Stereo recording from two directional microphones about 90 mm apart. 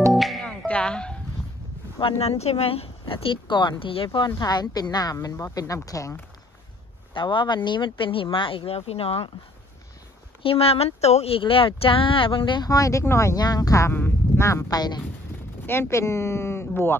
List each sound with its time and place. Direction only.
0.1 s music: centre (ahead or behind)
0.7 s a sound: 10° left (ahead or behind)
2.0 s speech: 85° left
4.4 s speech: 50° left (ahead or behind)
7.2 s speech: 65° left (ahead or behind); by 9.3 s 90° left
10.4 s speech: 90° left; by 12.6 s 70° left (ahead or behind)
12.6 s speech: 40° left (ahead or behind)
13.4 s speech: 45° left (ahead or behind)
13.9 s sheep: 20° left (ahead or behind)
14.4 s speech: 30° left (ahead or behind)
14.7 s speech: 50° left (ahead or behind)
15.6 s speech: 25° left (ahead or behind)